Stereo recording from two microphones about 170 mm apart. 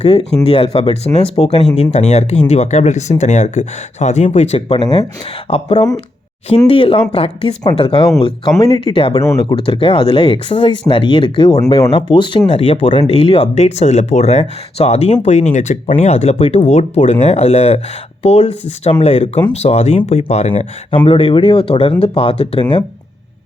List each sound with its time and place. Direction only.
0.0 s speech: 35° left (ahead or behind)